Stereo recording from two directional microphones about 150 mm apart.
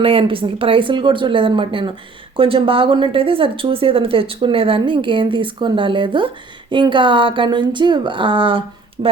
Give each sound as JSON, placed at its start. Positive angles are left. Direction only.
{"t": 0.0, "sound": "speech", "side_deg": -35}